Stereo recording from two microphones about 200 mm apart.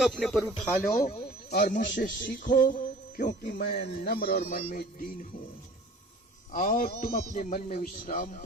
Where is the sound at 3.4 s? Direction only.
55° left (ahead or behind).